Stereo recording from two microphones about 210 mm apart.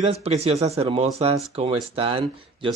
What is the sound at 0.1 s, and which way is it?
Speech, 30° right (ahead or behind).